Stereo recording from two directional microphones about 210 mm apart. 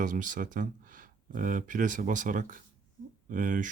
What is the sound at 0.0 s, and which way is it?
Speech, 40° right (ahead or behind).